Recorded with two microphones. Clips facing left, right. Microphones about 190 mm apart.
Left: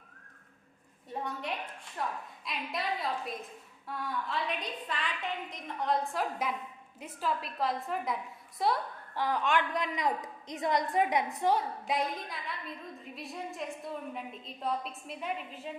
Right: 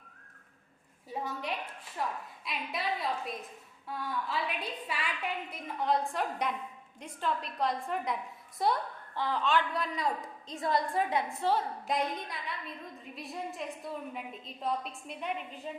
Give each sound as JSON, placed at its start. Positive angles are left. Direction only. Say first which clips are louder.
{"t": 1.1, "sound": "a woman's voice", "louder": "even", "side_deg": 0}
{"t": 9.1, "sound": "a woman's voice", "louder": "even", "side_deg": 15}
{"t": 11.9, "sound": "a woman's voice", "louder": "even", "side_deg": 0}